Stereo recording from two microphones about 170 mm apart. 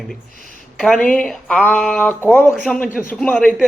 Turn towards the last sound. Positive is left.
turn(degrees=5)  # may be behind; listen again after turning